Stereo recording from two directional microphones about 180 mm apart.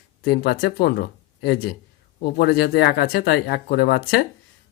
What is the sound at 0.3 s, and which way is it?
Speech, 60° left (ahead or behind).